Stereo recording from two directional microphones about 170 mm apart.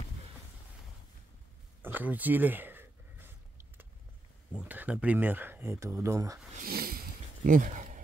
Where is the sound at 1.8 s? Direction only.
10° right (ahead or behind).